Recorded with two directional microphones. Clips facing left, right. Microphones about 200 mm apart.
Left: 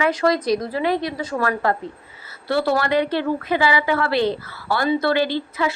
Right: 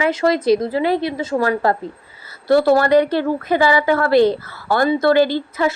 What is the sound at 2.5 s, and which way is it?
Speech, 45° right (ahead or behind).